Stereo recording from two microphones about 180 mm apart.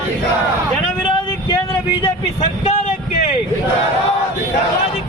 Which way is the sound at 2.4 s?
40° left (ahead or behind).